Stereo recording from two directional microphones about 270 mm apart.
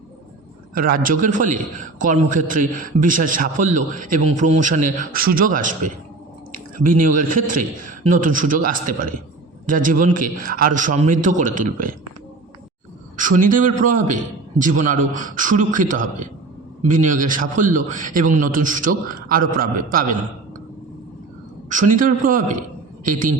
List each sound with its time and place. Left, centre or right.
0.7 s a man's voice: right
13.1 s a man's voice: right
21.7 s a man's voice: right